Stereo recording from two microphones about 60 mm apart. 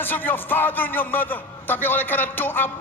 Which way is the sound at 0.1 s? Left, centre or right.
Left.